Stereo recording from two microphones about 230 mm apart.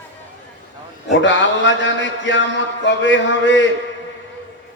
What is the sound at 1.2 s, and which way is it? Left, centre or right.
A man's voice, left.